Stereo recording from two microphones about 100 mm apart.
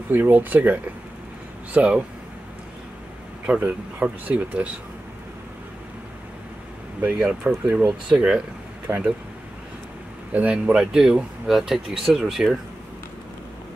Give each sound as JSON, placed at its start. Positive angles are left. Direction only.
{"t": 0.1, "sound": "speech", "side_deg": -20}
{"t": 3.4, "sound": "speech", "side_deg": -15}
{"t": 7.0, "sound": "speech", "side_deg": -15}
{"t": 10.3, "sound": "speech", "side_deg": -10}